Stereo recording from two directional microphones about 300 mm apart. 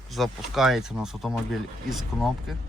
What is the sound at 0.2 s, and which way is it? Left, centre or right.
Speech, centre.